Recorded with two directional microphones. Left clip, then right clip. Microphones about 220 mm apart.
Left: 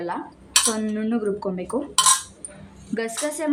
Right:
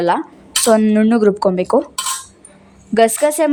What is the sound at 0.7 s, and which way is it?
A woman's voice, 40° right (ahead or behind).